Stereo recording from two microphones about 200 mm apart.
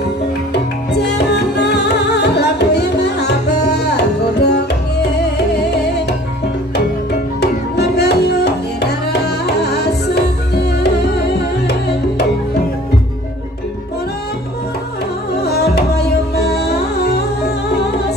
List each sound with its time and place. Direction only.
0.9 s music: 55° left (ahead or behind)
7.3 s music: 55° left (ahead or behind)
15.4 s music: 55° left (ahead or behind)